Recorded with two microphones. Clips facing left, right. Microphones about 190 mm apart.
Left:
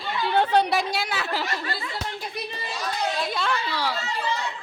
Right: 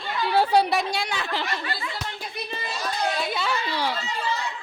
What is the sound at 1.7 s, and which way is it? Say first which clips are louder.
Speech: even; 40° left (ahead or behind).